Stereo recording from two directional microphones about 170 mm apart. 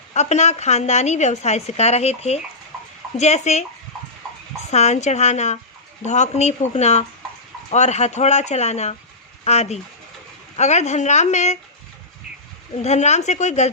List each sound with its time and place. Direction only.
0.1 s a woman's voice: 40° left (ahead or behind)
4.7 s a woman's voice: 40° left (ahead or behind)
12.7 s a woman's voice: 40° left (ahead or behind)